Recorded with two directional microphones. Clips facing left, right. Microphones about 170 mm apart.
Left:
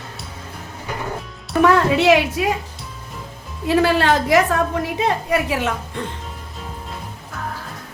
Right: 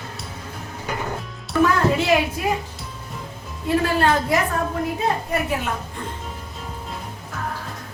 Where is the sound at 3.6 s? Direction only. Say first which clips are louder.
Left 3 dB; 90° left.